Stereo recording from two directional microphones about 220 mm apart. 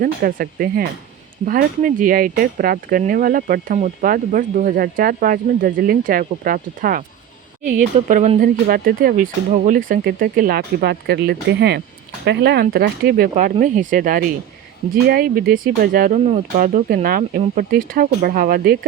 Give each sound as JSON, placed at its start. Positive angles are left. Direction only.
{"t": 0.0, "sound": "speech", "side_deg": -40}